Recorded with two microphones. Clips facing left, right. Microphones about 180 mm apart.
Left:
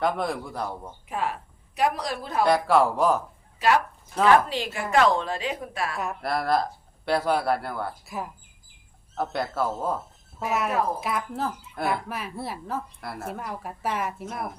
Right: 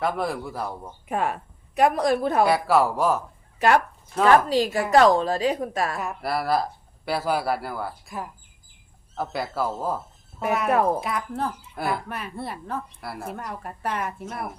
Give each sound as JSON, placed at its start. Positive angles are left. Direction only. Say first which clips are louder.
{"t": 0.0, "sound": "a woman's voice", "louder": "even", "side_deg": 0}
{"t": 1.0, "sound": "a woman's voice", "louder": "right 4 dB", "side_deg": -50}
{"t": 2.4, "sound": "a woman's voice", "louder": "left 2 dB", "side_deg": -5}
{"t": 4.4, "sound": "a woman's voice", "louder": "right 8 dB", "side_deg": -40}
{"t": 6.0, "sound": "a woman's voice", "louder": "right 1 dB", "side_deg": 0}
{"t": 11.0, "sound": "a woman's voice", "louder": "right 1 dB", "side_deg": 0}